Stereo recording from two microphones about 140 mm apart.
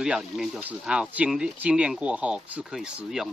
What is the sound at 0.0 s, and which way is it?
Speech, 5° right (ahead or behind).